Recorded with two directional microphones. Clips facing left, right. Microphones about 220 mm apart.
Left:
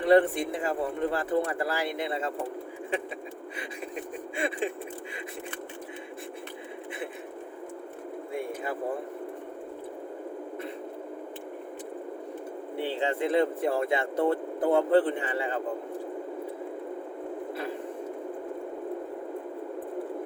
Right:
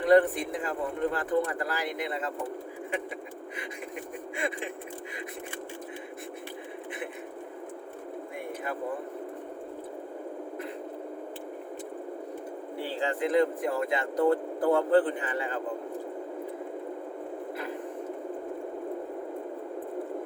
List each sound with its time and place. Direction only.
0.0 s speech: 30° left (ahead or behind)
4.4 s speech: 30° left (ahead or behind)
12.8 s speech: 25° left (ahead or behind)